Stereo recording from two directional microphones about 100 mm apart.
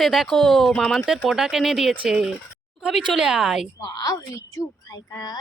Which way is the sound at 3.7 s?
40° left (ahead or behind).